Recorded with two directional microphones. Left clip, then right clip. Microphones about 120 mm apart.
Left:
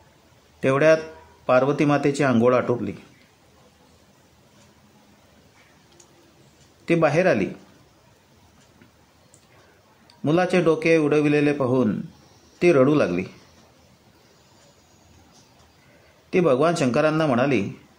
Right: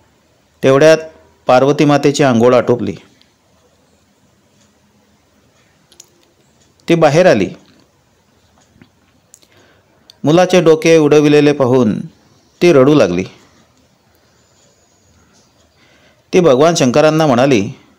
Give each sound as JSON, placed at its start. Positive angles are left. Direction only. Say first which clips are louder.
{"t": 0.6, "sound": "a man's voice", "louder": "right 10 dB", "side_deg": -85}
{"t": 6.9, "sound": "a man's voice", "louder": "right 10 dB", "side_deg": -90}
{"t": 10.2, "sound": "a man's voice", "louder": "right 11 dB", "side_deg": -90}
{"t": 16.3, "sound": "a man's voice", "louder": "right 10 dB", "side_deg": -90}